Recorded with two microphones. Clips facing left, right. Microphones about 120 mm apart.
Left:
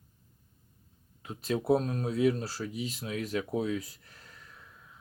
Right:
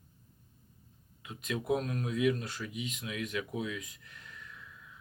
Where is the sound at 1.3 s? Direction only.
35° left (ahead or behind).